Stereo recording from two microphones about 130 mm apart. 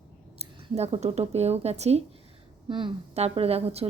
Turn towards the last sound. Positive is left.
turn(degrees=-50)  # may be behind; listen again after turning